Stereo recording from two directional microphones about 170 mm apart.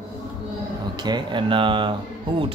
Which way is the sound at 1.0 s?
25° right (ahead or behind).